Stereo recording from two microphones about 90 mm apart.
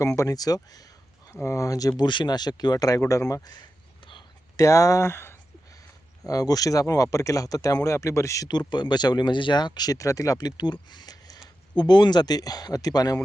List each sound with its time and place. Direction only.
0.2 s speech: 45° left (ahead or behind)
1.3 s speech: 30° left (ahead or behind)
2.0 s speech: 55° left (ahead or behind); by 3.5 s 40° left (ahead or behind)
3.5 s a sound: 60° left (ahead or behind)
4.5 s speech: 35° left (ahead or behind)
6.2 s speech: 45° left (ahead or behind)
8.4 s speech: 55° left (ahead or behind)
11.8 s speech: 60° left (ahead or behind)